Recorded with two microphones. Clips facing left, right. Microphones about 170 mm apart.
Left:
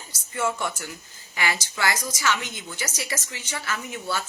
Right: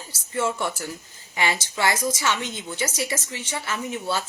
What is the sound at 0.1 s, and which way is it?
A woman's voice, 30° right (ahead or behind).